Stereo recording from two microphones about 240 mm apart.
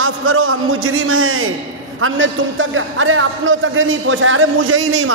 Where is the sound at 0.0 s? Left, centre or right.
Right.